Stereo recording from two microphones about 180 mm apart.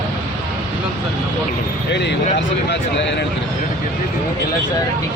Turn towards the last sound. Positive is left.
turn(degrees=75)  # may be behind; listen again after turning